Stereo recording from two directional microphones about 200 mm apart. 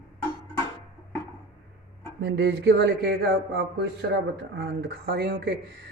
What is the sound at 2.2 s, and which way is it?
Speech, 55° right (ahead or behind).